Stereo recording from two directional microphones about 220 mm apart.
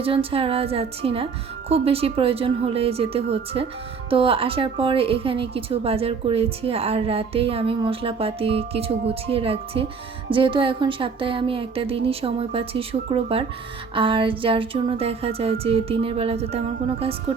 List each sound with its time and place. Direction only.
0.0 s a woman's voice: 25° right (ahead or behind)